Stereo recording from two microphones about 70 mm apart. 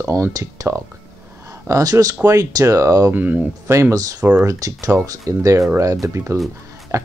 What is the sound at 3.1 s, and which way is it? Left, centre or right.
Speech, right.